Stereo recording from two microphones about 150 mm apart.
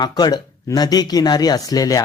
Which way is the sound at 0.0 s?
25° left (ahead or behind).